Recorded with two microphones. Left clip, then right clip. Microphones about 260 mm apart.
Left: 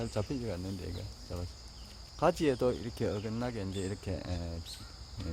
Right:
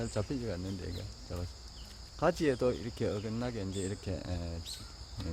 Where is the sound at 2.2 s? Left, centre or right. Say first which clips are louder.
Left 1 dB; centre.